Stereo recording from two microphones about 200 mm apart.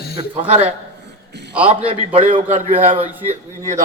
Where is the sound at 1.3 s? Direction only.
55° right (ahead or behind).